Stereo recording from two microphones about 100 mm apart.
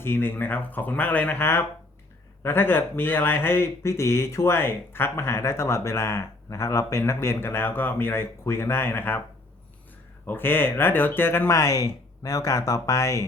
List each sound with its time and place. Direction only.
0.0 s speech: 20° left (ahead or behind)
10.2 s speech: 20° left (ahead or behind)